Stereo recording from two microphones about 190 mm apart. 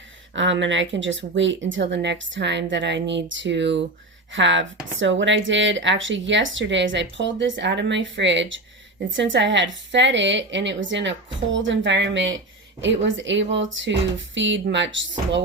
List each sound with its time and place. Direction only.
0.3 s speech: 75° right (ahead or behind)